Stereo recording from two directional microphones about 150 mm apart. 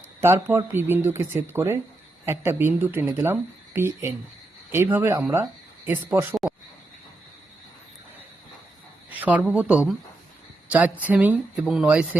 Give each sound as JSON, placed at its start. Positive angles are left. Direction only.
{"t": 0.2, "sound": "speech", "side_deg": -15}
{"t": 6.4, "sound": "a sound", "side_deg": 0}
{"t": 9.0, "sound": "a woman's voice", "side_deg": -10}